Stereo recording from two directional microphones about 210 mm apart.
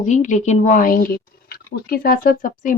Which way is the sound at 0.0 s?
35° left (ahead or behind).